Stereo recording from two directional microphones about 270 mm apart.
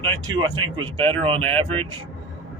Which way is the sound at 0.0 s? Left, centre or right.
Centre.